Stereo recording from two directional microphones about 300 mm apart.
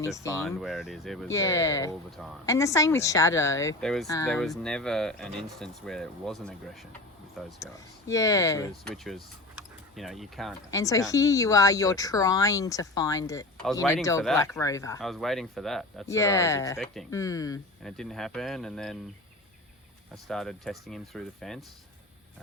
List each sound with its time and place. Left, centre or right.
0.2 s speech: centre
7.6 s speech: centre
10.7 s speech: centre
20.2 s speech: centre